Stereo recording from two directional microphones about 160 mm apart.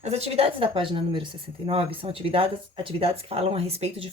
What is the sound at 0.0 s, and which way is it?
A woman's voice, 40° right (ahead or behind).